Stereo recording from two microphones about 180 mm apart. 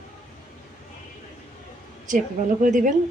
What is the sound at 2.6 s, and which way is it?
Speech, 45° right (ahead or behind).